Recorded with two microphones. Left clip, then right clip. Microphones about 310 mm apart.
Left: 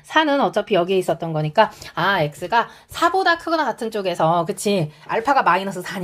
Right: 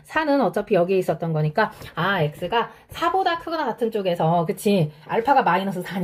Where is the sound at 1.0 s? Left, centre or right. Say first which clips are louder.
Left 2 dB; centre.